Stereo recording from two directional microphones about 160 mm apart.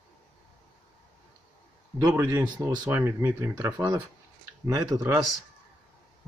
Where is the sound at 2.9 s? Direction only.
15° right (ahead or behind).